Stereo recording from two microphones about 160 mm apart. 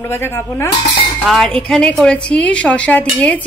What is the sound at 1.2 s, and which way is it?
A woman's voice, centre (ahead or behind).